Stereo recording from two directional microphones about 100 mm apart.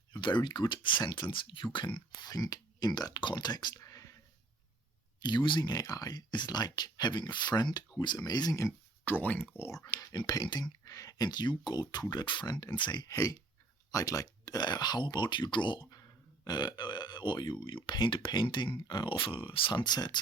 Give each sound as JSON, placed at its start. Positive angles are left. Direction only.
{"t": 0.1, "sound": "speech", "side_deg": 50}
{"t": 2.2, "sound": "speech", "side_deg": 40}
{"t": 3.8, "sound": "a sound", "side_deg": 30}
{"t": 5.2, "sound": "speech", "side_deg": 50}
{"t": 9.0, "sound": "speech", "side_deg": 20}
{"t": 9.8, "sound": "speech", "side_deg": 40}
{"t": 13.1, "sound": "speech", "side_deg": 35}
{"t": 15.9, "sound": "speech", "side_deg": 40}